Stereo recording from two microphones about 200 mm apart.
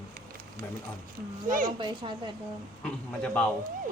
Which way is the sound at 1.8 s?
25° right (ahead or behind).